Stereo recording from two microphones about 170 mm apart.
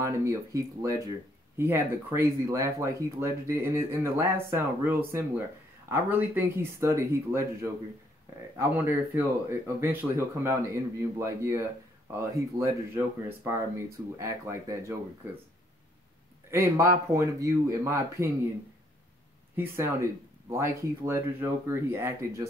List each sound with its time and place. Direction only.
0.0 s speech: 15° right (ahead or behind)
16.4 s speech: 15° right (ahead or behind)
19.5 s speech: 15° right (ahead or behind)